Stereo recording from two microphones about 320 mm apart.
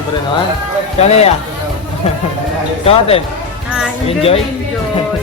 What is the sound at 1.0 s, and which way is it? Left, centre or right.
Speech, centre.